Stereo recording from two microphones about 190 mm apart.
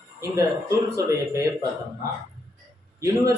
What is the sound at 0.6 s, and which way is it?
Speech, 15° right (ahead or behind).